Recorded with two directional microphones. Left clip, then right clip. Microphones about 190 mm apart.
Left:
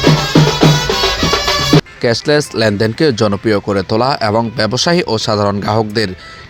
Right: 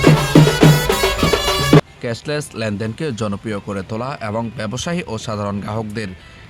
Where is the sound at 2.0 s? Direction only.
30° left (ahead or behind).